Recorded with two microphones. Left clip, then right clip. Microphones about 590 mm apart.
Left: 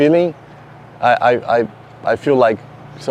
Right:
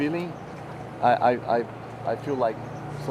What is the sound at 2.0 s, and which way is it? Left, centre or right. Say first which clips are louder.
Speech: left 13 dB; left.